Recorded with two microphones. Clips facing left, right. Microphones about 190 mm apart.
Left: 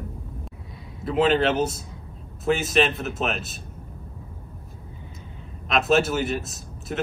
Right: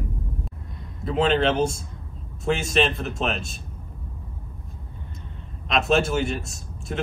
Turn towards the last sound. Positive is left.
turn(degrees=0)  # may be behind; listen again after turning